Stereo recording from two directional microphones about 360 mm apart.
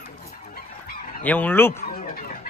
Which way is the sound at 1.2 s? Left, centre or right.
Centre.